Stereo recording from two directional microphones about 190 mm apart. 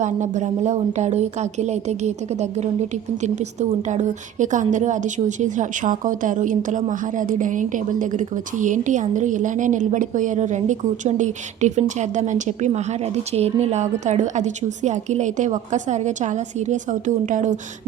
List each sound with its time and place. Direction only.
0.0 s a woman's voice: 40° right (ahead or behind)